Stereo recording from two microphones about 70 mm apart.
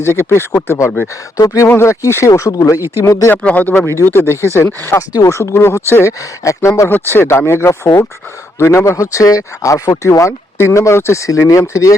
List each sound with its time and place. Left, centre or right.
0.0 s speech: left
3.3 s speech: left
4.9 s speech: left
6.8 s speech: left